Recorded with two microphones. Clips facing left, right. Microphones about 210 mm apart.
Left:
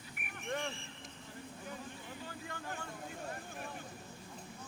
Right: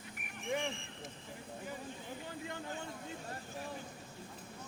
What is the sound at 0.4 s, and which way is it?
Vehicle, centre (ahead or behind).